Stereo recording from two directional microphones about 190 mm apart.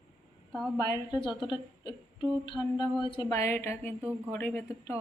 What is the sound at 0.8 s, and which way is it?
A woman's voice, 20° left (ahead or behind).